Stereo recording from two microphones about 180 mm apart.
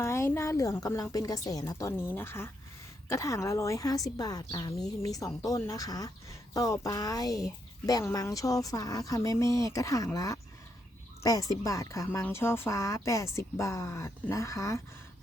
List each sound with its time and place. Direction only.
0.0 s speech: 15° left (ahead or behind)